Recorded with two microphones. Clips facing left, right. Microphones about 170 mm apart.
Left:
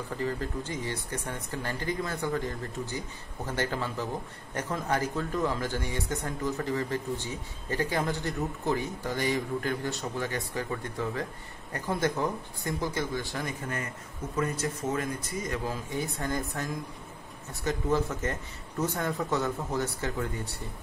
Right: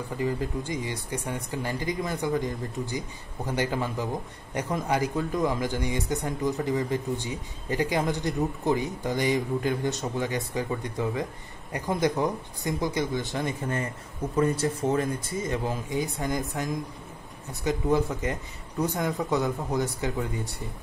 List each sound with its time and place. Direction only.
0.2 s speech: 15° right (ahead or behind)